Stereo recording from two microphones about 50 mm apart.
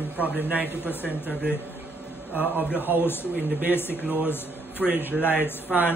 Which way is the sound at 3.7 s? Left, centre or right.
Left.